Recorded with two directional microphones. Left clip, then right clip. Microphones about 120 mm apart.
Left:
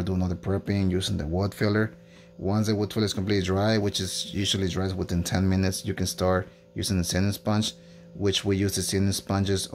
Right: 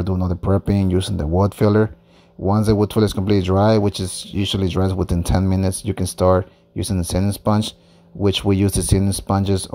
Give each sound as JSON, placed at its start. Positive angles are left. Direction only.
{"t": 0.7, "sound": "speech", "side_deg": -55}